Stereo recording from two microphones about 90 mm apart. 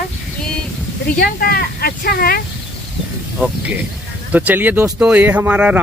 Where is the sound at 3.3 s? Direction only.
15° right (ahead or behind).